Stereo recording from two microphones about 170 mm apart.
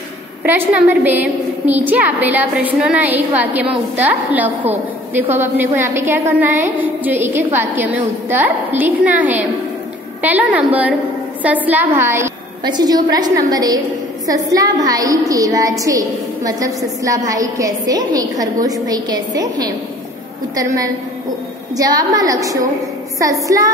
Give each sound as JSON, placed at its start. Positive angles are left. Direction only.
{"t": 0.4, "sound": "a woman's voice", "side_deg": -10}
{"t": 20.5, "sound": "a woman's voice", "side_deg": -20}